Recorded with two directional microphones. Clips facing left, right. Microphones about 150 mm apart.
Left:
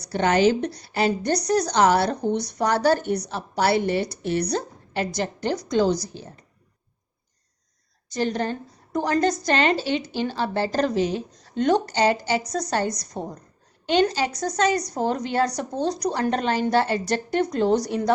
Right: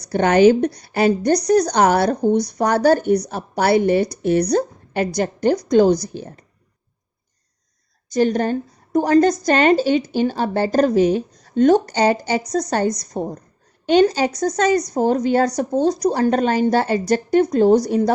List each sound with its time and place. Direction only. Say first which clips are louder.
0.1 s speech: right 6 dB; 50° right (ahead or behind)
8.2 s a woman's voice: right 7 dB; 50° right (ahead or behind)